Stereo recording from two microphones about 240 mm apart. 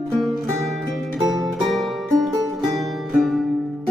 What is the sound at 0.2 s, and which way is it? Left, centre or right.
Music, centre.